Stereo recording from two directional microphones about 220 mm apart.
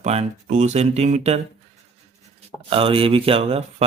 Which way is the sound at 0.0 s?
30° right (ahead or behind).